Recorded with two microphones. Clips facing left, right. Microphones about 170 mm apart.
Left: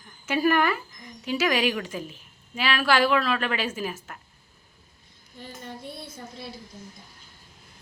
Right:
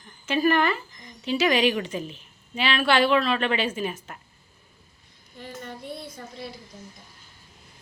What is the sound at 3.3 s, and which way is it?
Speech, 25° right (ahead or behind).